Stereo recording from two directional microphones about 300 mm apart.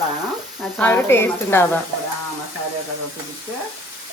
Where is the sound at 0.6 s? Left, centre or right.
Centre.